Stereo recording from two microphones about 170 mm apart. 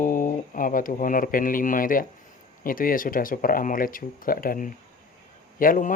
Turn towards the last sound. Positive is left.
turn(degrees=55)  # may be behind; listen again after turning